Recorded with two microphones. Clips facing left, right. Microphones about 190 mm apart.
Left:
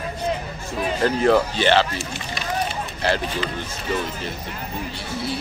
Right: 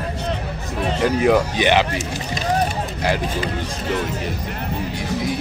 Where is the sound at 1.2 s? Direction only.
10° right (ahead or behind).